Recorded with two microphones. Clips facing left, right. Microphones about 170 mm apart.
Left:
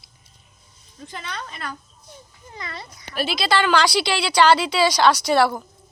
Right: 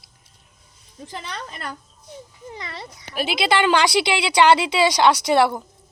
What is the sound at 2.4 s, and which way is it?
A woman's voice, 20° right (ahead or behind).